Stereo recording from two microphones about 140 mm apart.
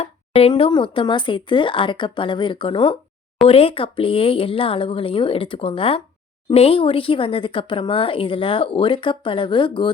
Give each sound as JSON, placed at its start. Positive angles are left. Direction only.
{"t": 0.0, "sound": "speech", "side_deg": 45}